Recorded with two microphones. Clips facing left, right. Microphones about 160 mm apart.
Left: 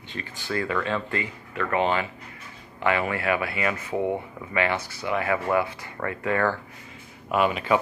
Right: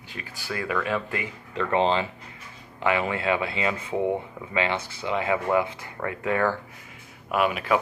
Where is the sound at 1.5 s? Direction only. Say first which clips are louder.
Right 2 dB; 30° right (ahead or behind).